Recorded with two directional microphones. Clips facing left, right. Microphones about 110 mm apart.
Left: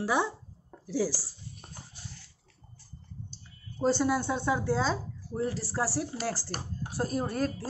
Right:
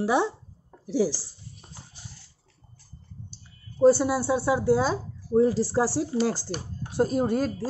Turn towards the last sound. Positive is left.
turn(degrees=-20)  # may be behind; listen again after turning